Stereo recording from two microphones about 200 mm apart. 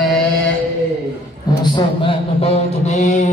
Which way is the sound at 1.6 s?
25° left (ahead or behind).